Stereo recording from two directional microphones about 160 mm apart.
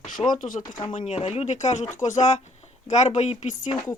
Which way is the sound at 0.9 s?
45° left (ahead or behind).